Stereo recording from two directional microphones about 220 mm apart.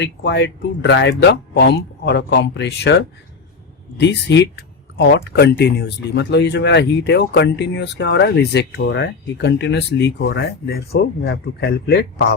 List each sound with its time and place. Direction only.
0.0 s speech: 50° left (ahead or behind)